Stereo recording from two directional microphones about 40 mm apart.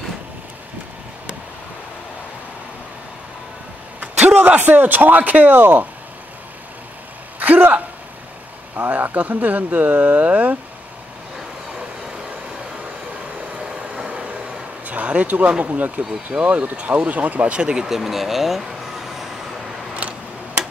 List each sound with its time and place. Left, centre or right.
4.6 s speech: right
7.3 s a sound: right
8.7 s speech: right
13.9 s vehicle: right
14.9 s speech: right
16.7 s speech: right
17.6 s speech: right
17.8 s speech: centre
19.9 s a sound: right